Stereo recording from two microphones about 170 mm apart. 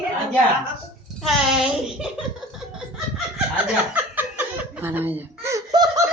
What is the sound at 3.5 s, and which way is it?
Chuckle, 10° right (ahead or behind).